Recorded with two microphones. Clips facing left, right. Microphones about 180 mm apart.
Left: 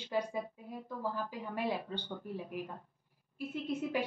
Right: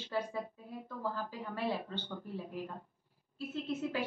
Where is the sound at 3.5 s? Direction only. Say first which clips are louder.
Left 1 dB; 15° left (ahead or behind).